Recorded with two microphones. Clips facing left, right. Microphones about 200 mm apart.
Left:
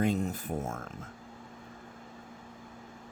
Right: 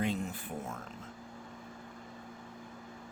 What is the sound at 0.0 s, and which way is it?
Speech, 40° left (ahead or behind).